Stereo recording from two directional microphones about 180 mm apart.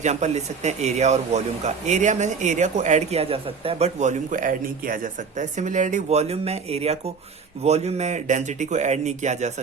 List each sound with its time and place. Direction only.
0.0 s a man's voice: 40° right (ahead or behind)